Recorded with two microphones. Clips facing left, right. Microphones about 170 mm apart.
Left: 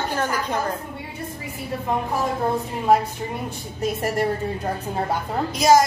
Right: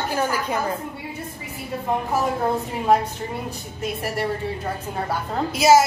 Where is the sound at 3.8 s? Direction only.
45° left (ahead or behind).